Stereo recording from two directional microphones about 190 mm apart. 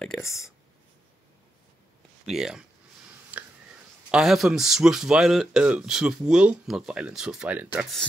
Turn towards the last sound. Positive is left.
turn(degrees=-5)  # may be behind; listen again after turning